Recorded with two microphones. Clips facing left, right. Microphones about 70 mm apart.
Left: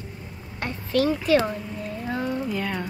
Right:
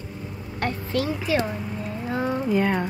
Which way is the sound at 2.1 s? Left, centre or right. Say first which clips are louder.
Right 4 dB; right.